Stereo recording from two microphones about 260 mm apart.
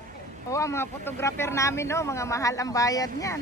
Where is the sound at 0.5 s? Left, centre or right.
Centre.